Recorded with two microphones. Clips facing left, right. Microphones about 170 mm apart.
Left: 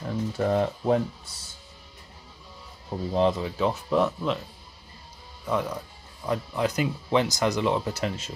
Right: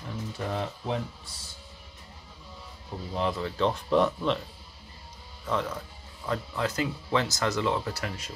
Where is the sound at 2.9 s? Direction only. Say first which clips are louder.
Left 7 dB; 40° left (ahead or behind).